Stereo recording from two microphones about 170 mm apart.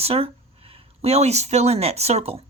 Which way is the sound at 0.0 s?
35° right (ahead or behind).